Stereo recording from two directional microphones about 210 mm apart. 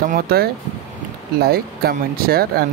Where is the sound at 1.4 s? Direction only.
45° right (ahead or behind).